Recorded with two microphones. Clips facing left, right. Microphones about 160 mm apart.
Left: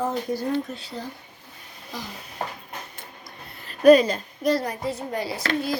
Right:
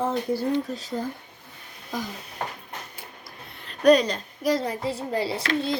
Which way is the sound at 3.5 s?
5° left (ahead or behind).